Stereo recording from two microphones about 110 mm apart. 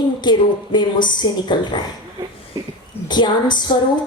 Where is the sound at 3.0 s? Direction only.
40° left (ahead or behind).